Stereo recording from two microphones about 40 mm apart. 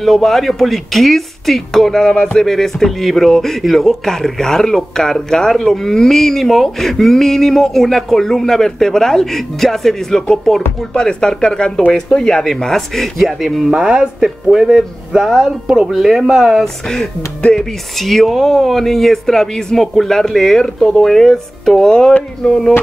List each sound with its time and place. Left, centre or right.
0.0 s speech: centre
13.7 s speech: centre
16.6 s speech: centre